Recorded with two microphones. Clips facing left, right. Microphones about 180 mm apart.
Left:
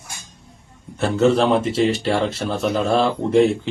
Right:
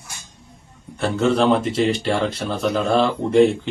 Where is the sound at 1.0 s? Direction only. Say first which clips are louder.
Left 2 dB; 5° left (ahead or behind).